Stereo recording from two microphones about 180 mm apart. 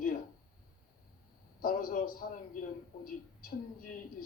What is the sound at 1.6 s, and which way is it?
A man's voice, 55° left (ahead or behind).